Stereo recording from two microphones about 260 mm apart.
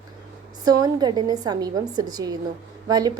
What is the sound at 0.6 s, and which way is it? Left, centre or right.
A woman's voice, centre.